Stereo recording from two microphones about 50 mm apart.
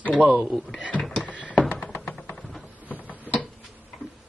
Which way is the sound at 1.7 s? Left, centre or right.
Left.